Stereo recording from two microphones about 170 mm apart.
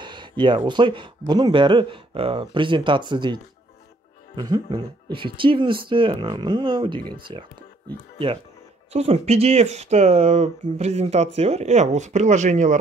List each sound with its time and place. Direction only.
0.0 s speech: 30° right (ahead or behind)
4.4 s speech: 30° right (ahead or behind)
8.9 s speech: 40° right (ahead or behind)